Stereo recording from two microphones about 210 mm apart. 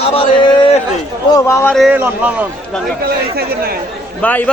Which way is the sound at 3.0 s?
45° right (ahead or behind).